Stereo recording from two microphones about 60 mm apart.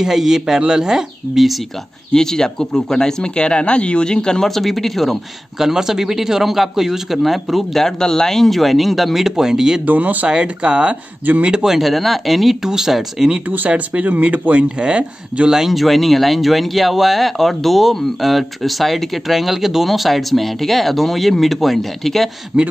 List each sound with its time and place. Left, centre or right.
0.0 s speech: centre
2.1 s speech: centre
9.8 s speech: right
11.5 s speech: centre
13.7 s speech: right
15.5 s speech: centre